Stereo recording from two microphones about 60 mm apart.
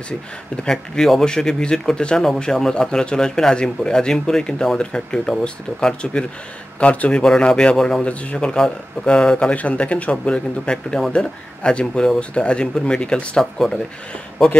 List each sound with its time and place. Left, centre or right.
0.7 s a man's voice: centre
8.0 s a man's voice: left